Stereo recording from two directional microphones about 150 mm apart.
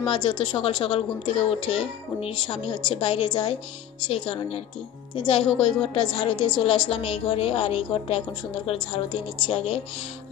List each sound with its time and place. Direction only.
0.0 s a woman's voice: 35° left (ahead or behind)